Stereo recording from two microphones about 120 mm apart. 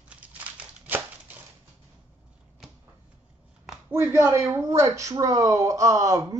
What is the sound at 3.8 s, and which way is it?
Speech, 20° right (ahead or behind).